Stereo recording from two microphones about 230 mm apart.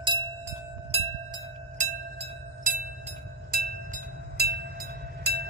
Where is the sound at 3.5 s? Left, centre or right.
Right.